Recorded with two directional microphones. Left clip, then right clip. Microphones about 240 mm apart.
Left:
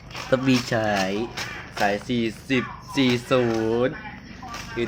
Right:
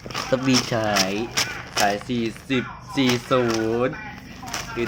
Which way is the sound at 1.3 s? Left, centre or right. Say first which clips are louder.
Right 7 dB; right.